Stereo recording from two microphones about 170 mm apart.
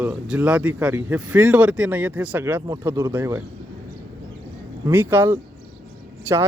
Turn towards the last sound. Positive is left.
turn(degrees=-15)  # may be behind; listen again after turning